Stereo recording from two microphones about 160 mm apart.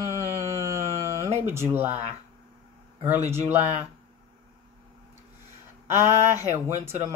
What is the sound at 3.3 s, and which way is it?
Speech, 15° right (ahead or behind).